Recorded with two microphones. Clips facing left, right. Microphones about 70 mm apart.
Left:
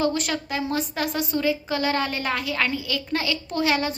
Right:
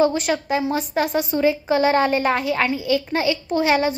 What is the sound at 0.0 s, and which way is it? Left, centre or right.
A woman's voice, right.